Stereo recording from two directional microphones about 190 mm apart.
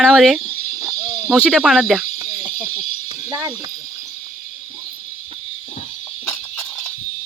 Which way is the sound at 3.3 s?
20° right (ahead or behind).